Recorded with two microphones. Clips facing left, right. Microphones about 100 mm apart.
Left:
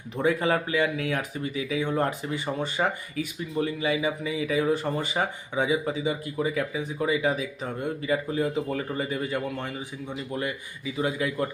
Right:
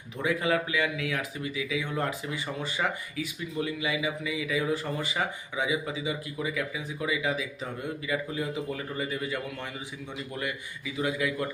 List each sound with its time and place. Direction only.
0.2 s speech: 40° left (ahead or behind)
1.8 s a man's voice: 20° left (ahead or behind)
2.8 s a man's voice: 45° left (ahead or behind); by 11.4 s 30° left (ahead or behind)